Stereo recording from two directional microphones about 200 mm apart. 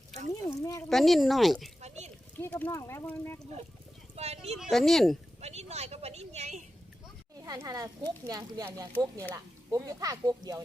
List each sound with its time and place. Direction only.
0.6 s speech: 15° left (ahead or behind)
0.9 s speech: centre (ahead or behind)
4.1 s speech: 30° right (ahead or behind)
4.5 s speech: centre (ahead or behind)
5.4 s speech: 35° right (ahead or behind)
7.4 s speech: 15° right (ahead or behind)